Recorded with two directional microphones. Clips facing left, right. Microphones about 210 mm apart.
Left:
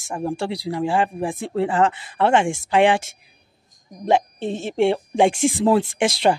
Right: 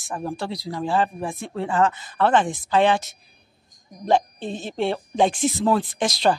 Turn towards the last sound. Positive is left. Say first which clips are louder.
# left 3 dB
turn(degrees=25)  # may be behind; listen again after turning